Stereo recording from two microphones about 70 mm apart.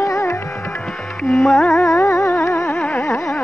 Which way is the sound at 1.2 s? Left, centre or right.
Centre.